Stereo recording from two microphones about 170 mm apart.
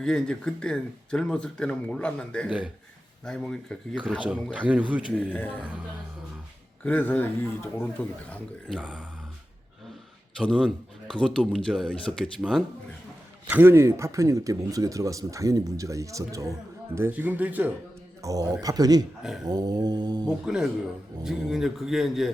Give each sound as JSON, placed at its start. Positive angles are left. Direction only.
{"t": 0.0, "sound": "speech", "side_deg": 5}
{"t": 4.5, "sound": "speech", "side_deg": -10}
{"t": 5.1, "sound": "a man's voice", "side_deg": 10}
{"t": 6.8, "sound": "a man's voice", "side_deg": 10}
{"t": 8.8, "sound": "speech", "side_deg": -5}
{"t": 10.3, "sound": "speech", "side_deg": 5}
{"t": 18.2, "sound": "speech", "side_deg": -20}
{"t": 20.4, "sound": "speech", "side_deg": -5}